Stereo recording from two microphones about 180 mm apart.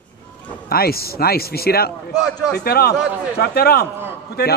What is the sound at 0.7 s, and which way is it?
Speech, 60° left (ahead or behind).